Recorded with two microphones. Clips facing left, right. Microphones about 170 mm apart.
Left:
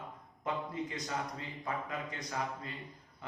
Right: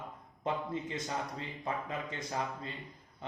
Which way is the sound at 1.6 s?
25° right (ahead or behind).